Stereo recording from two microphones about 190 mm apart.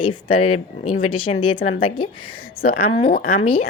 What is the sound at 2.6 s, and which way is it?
Speech, 50° left (ahead or behind).